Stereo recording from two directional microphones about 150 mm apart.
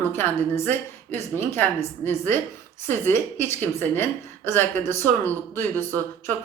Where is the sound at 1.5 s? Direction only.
15° left (ahead or behind).